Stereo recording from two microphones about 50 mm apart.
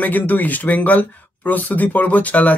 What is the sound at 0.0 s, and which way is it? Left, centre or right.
Speech, left.